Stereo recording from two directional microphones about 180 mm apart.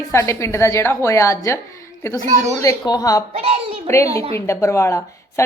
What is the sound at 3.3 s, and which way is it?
Speech, 35° right (ahead or behind).